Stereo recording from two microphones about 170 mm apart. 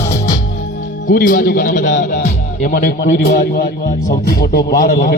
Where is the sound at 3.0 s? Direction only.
75° left (ahead or behind).